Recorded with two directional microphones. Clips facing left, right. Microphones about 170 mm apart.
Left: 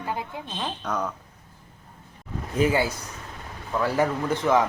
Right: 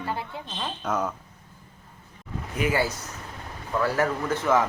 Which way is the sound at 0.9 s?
5° right (ahead or behind).